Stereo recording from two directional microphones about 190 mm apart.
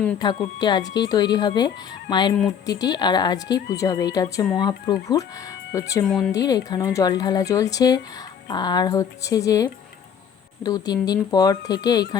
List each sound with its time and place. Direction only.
0.2 s speech: 20° left (ahead or behind)
6.1 s speech: 5° left (ahead or behind)
6.3 s speech: 20° left (ahead or behind)